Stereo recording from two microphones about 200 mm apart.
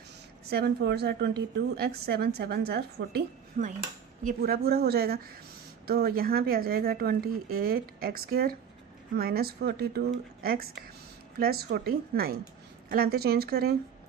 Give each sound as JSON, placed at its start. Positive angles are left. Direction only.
{"t": 0.5, "sound": "a woman's voice", "side_deg": -55}